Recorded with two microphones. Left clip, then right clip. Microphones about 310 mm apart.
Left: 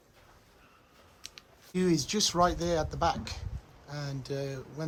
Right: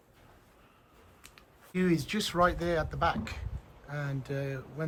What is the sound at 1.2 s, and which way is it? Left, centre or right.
Speech, centre.